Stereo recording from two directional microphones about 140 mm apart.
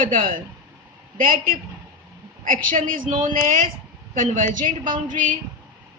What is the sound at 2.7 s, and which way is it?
Speech, 75° right (ahead or behind).